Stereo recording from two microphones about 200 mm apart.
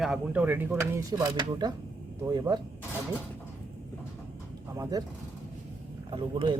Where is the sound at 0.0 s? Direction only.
5° right (ahead or behind); by 2.6 s 20° right (ahead or behind).